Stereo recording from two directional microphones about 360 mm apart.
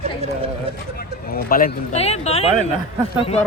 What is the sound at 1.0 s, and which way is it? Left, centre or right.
Speech, left.